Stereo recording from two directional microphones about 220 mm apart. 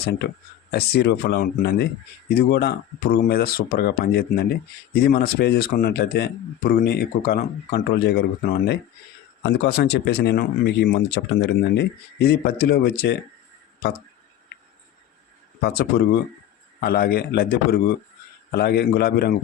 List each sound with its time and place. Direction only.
0.7 s speech: 50° left (ahead or behind)
7.9 s speech: 50° left (ahead or behind)
16.8 s speech: 45° left (ahead or behind)